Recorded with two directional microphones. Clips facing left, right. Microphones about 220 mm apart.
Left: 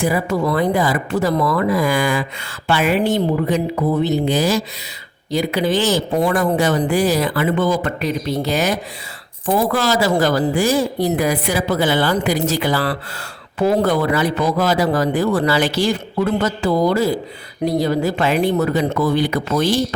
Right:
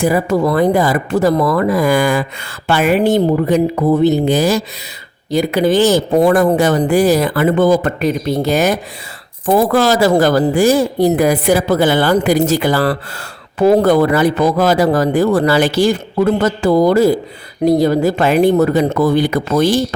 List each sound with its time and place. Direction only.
0.0 s speech: 45° right (ahead or behind)